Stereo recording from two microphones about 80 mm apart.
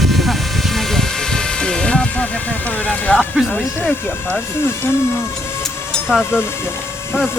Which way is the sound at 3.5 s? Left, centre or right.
Left.